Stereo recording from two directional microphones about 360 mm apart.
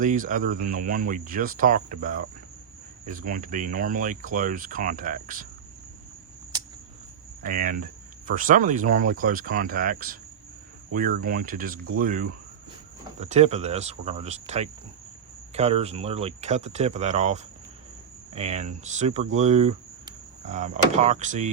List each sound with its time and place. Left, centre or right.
0.0 s speech: right
7.4 s speech: right